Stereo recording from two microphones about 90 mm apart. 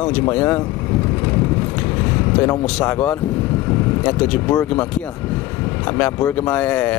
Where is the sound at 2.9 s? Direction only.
20° left (ahead or behind).